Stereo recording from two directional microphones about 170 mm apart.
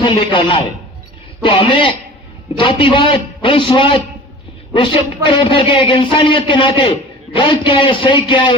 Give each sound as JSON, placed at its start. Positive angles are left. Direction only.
{"t": 0.0, "sound": "a man's voice", "side_deg": 30}